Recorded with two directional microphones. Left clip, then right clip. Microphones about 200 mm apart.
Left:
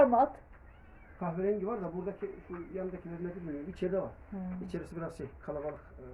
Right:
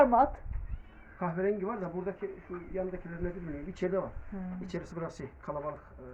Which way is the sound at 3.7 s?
15° right (ahead or behind).